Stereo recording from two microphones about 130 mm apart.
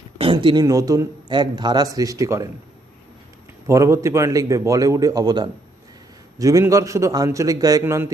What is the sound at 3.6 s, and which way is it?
A man's voice, 25° right (ahead or behind).